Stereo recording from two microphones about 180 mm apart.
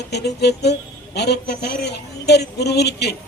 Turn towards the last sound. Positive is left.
turn(degrees=65)  # may be behind; listen again after turning